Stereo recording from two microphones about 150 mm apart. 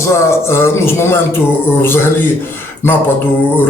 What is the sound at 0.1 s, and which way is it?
A man's voice, 15° left (ahead or behind).